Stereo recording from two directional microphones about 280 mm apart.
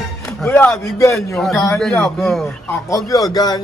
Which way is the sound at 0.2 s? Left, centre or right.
Centre.